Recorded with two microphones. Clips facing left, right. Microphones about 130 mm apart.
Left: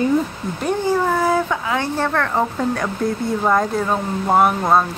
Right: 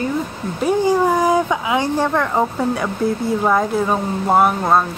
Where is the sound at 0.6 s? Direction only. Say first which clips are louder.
Right 3 dB; 15° right (ahead or behind).